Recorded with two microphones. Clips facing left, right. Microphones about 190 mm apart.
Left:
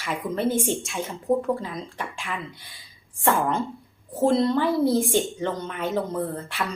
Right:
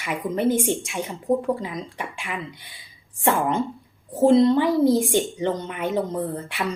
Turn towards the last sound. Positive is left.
turn(degrees=-15)  # may be behind; listen again after turning